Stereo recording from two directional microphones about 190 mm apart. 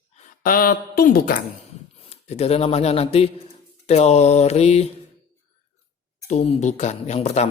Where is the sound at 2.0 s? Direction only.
35° left (ahead or behind).